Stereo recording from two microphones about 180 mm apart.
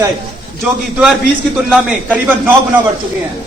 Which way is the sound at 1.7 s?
10° right (ahead or behind).